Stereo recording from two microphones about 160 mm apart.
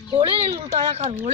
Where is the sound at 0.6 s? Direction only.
35° right (ahead or behind).